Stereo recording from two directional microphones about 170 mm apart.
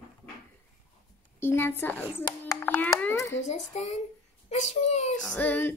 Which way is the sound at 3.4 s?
45° left (ahead or behind).